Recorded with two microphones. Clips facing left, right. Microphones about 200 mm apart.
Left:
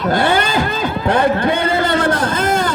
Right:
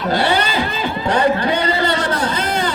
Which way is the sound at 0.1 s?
50° left (ahead or behind).